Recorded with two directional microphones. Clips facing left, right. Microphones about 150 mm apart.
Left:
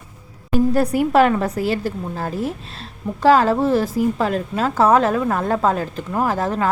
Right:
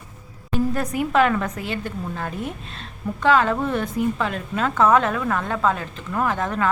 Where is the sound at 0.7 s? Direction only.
35° left (ahead or behind).